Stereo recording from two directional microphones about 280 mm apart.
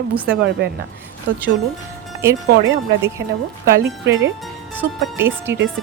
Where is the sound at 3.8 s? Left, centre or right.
Right.